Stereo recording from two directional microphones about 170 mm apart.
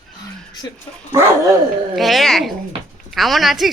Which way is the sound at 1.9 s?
Centre (ahead or behind).